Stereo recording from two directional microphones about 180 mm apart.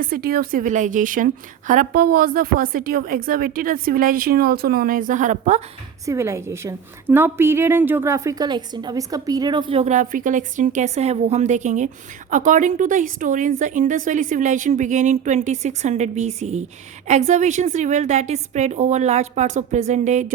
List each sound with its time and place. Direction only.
0.0 s a woman's voice: 55° right (ahead or behind)
6.1 s a woman's voice: 15° right (ahead or behind); by 20.3 s 40° right (ahead or behind)